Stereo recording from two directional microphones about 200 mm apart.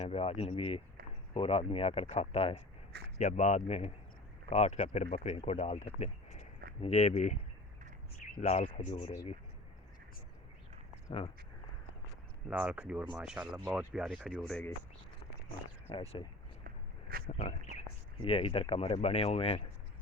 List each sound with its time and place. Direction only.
0.0 s speech: 30° left (ahead or behind)
8.4 s speech: 35° left (ahead or behind)
12.5 s speech: 5° right (ahead or behind)
15.9 s speech: 25° left (ahead or behind)
16.6 s walk: 50° right (ahead or behind)
17.2 s speech: 35° left (ahead or behind)